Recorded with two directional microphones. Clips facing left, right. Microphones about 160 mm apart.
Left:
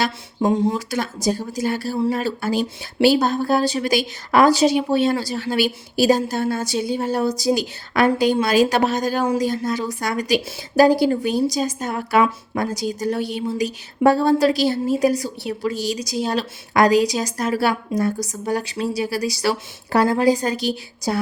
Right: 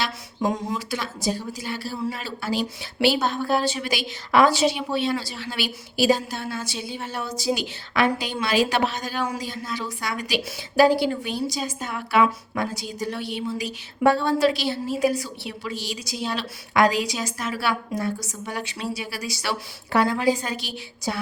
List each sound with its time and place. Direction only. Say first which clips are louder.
0.4 s a woman's voice: left 7 dB; 30° left (ahead or behind)
0.9 s a woman's voice: left 5 dB; 45° left (ahead or behind)